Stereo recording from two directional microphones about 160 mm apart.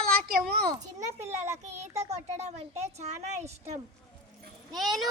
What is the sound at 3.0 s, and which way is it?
Speech, 45° right (ahead or behind).